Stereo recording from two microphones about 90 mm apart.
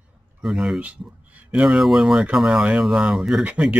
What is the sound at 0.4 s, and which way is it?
Speech, centre (ahead or behind).